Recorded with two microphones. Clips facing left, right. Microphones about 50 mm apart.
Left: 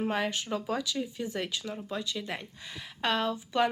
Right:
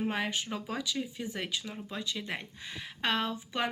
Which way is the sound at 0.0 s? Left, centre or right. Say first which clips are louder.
Left 2 dB; centre.